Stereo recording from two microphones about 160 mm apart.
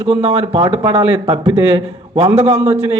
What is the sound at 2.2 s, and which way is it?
Speech, 45° right (ahead or behind).